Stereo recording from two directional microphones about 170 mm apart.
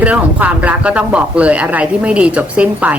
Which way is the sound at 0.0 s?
10° right (ahead or behind).